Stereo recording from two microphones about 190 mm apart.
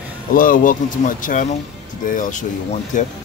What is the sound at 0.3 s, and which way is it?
Speech, 45° left (ahead or behind).